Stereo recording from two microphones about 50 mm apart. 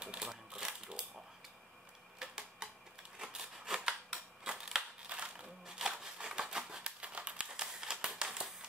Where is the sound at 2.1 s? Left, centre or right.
Centre.